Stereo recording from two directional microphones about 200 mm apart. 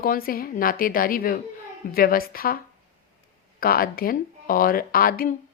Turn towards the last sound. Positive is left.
turn(degrees=45)  # may be behind; listen again after turning